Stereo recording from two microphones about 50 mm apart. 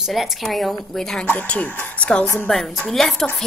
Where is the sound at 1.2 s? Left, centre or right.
Left.